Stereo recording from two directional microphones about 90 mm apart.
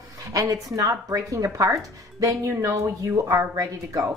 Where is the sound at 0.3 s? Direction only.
40° right (ahead or behind).